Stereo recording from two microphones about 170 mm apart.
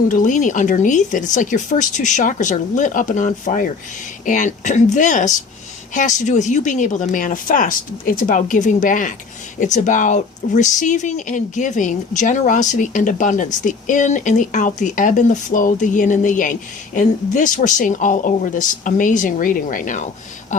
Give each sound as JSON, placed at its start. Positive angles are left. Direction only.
{"t": 0.1, "sound": "speech", "side_deg": 50}